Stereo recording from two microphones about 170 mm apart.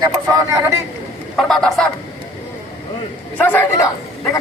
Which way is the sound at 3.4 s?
10° left (ahead or behind).